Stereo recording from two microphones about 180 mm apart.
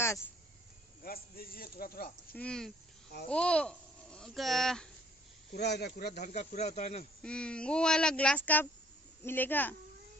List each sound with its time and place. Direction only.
1.0 s a man's voice: 55° left (ahead or behind)
2.3 s speech: 5° left (ahead or behind)
5.5 s a man's voice: 65° left (ahead or behind)
6.3 s speech: 40° left (ahead or behind)
7.2 s a woman's voice: 5° left (ahead or behind)